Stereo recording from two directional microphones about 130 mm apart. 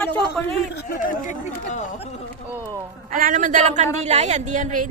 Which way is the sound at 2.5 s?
20° right (ahead or behind).